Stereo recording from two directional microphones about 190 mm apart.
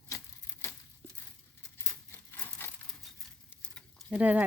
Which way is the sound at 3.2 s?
Centre (ahead or behind).